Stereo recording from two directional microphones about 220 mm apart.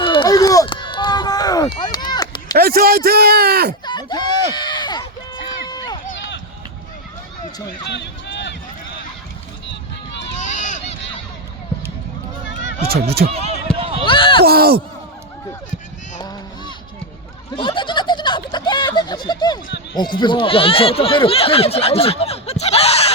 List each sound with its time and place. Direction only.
0.0 s run: 20° left (ahead or behind)
2.6 s speech: 45° right (ahead or behind)
3.8 s a sound: 20° left (ahead or behind)
5.6 s run: 20° left (ahead or behind)
7.9 s run: 50° left (ahead or behind)
10.4 s run: 35° left (ahead or behind)
13.2 s speech: 40° right (ahead or behind)
13.7 s run: 25° right (ahead or behind)
14.0 s a sound: 25° left (ahead or behind)
14.4 s speech: 45° right (ahead or behind)
16.2 s a sound: 20° left (ahead or behind)
20.0 s speech: 20° left (ahead or behind)